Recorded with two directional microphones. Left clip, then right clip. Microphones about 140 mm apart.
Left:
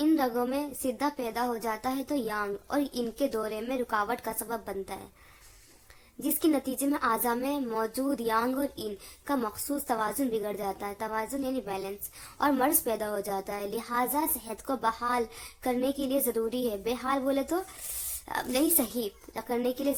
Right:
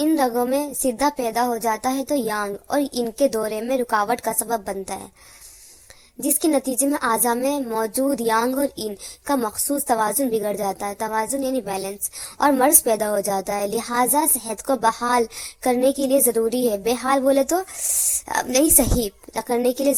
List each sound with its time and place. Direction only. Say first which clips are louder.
0.0 s a woman's voice: right 7 dB; 45° right (ahead or behind)
6.4 s a woman's voice: right 7 dB; 40° right (ahead or behind)